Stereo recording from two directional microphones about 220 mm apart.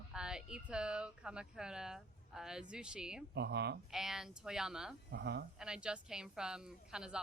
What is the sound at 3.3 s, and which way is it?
Speech, 50° right (ahead or behind).